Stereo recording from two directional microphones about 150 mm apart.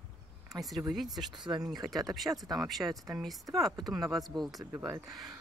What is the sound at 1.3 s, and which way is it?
Speech, 30° right (ahead or behind).